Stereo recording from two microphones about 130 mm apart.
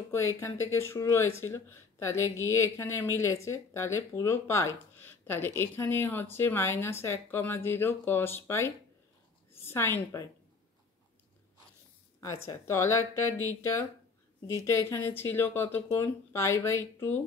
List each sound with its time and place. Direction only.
0.1 s a woman's voice: 20° left (ahead or behind)
12.4 s speech: 20° left (ahead or behind)